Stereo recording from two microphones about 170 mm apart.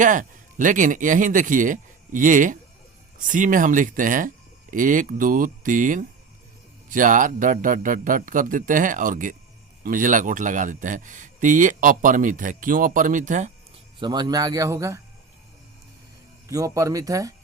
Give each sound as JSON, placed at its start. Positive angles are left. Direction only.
{"t": 0.0, "sound": "speech", "side_deg": -50}
{"t": 14.0, "sound": "a man's voice", "side_deg": -25}
{"t": 16.5, "sound": "a man's voice", "side_deg": -20}